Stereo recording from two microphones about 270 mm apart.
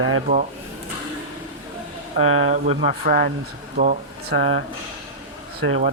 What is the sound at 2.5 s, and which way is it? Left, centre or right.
Speech, right.